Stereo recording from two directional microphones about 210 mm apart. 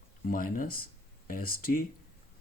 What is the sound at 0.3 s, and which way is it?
Speech, 45° left (ahead or behind).